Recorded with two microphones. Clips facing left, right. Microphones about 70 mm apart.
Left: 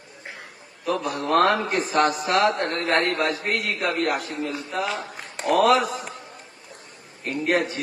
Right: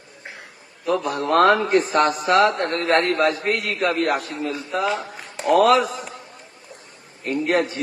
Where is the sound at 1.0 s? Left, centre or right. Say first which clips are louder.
Right 3 dB; right.